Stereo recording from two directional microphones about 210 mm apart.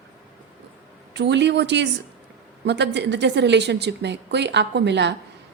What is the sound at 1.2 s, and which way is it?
A woman's voice, 55° right (ahead or behind).